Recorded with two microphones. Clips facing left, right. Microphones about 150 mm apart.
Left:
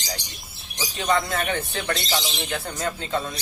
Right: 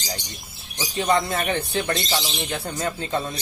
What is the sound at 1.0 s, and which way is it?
Speech, 30° right (ahead or behind).